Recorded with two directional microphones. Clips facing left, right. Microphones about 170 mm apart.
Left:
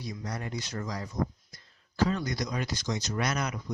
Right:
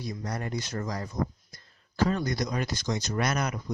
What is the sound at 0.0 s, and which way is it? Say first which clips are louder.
Speech: right 3 dB; 50° right (ahead or behind).